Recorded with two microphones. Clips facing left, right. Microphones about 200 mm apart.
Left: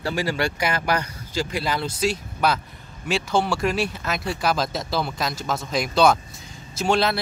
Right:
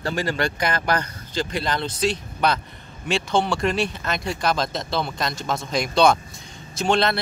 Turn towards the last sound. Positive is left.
turn(degrees=5)  # may be behind; listen again after turning